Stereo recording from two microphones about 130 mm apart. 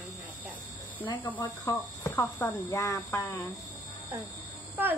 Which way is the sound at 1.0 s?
40° left (ahead or behind).